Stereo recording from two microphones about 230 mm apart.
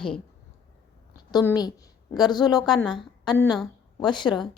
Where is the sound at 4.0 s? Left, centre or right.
Centre.